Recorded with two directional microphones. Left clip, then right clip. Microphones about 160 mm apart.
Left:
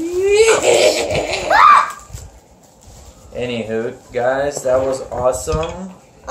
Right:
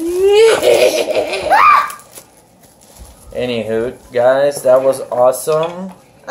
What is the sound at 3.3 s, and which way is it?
Speech, 30° right (ahead or behind).